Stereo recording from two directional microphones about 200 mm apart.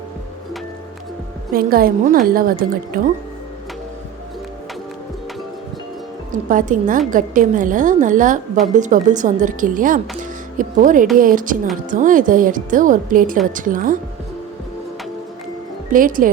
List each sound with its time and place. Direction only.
1.5 s a woman's voice: 45° right (ahead or behind)
6.5 s a woman's voice: 40° right (ahead or behind)
15.9 s a woman's voice: 45° right (ahead or behind)